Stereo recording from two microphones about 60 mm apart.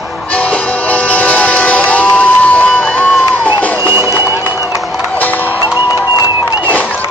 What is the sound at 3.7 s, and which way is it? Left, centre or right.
Run, right.